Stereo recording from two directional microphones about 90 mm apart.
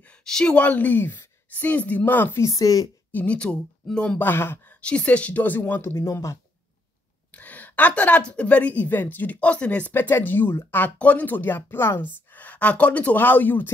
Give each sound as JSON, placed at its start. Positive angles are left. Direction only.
{"t": 0.2, "sound": "a woman's voice", "side_deg": 10}
{"t": 2.4, "sound": "speech", "side_deg": 40}
{"t": 3.1, "sound": "speech", "side_deg": 15}
{"t": 4.2, "sound": "a woman's voice", "side_deg": 25}
{"t": 4.8, "sound": "a woman's voice", "side_deg": 15}
{"t": 7.3, "sound": "a woman's voice", "side_deg": 15}